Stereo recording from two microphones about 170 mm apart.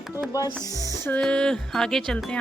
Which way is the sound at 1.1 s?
5° left (ahead or behind).